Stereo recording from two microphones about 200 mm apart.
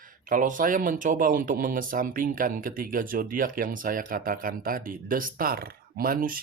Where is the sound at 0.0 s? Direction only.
40° right (ahead or behind).